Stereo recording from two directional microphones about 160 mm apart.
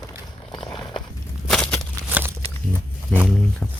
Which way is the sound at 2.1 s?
15° right (ahead or behind).